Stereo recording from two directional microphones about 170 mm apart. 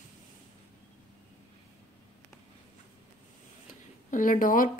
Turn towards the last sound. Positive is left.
turn(degrees=55)  # may be behind; listen again after turning